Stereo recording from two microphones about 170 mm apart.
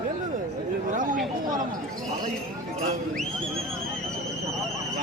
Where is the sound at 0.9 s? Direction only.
50° right (ahead or behind).